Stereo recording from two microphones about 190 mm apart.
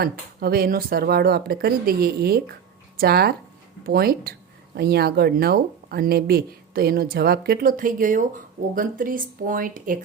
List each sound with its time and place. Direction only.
0.0 s speech: 55° right (ahead or behind)